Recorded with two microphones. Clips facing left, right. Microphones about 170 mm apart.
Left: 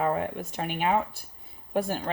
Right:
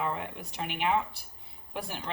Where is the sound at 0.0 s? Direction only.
45° left (ahead or behind).